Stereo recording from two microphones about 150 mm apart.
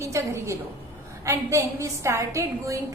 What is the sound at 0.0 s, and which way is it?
A woman's voice, 20° right (ahead or behind).